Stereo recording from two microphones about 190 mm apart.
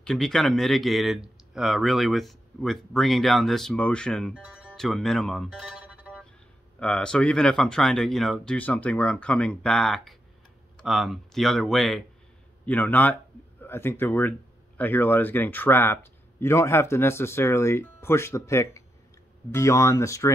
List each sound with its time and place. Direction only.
0.0 s speech: 5° left (ahead or behind)